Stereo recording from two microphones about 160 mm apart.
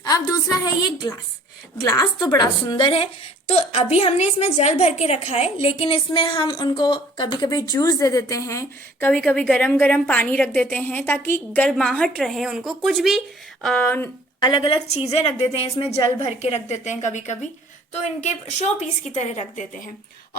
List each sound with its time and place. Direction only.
0.0 s a woman's voice: 20° left (ahead or behind)
14.4 s a woman's voice: 30° left (ahead or behind)
16.4 s a woman's voice: 45° left (ahead or behind)
18.8 s a woman's voice: 45° left (ahead or behind)